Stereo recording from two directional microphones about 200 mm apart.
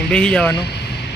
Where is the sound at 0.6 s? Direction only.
55° left (ahead or behind).